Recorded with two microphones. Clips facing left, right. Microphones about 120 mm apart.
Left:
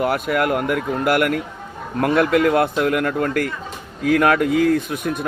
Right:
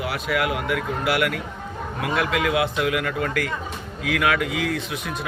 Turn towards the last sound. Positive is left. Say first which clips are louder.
# left 7 dB
turn(degrees=50)  # may be behind; listen again after turning